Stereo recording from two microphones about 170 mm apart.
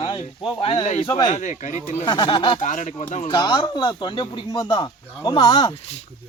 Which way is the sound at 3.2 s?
25° left (ahead or behind).